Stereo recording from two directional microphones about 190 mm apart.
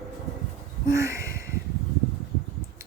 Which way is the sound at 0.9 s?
15° right (ahead or behind).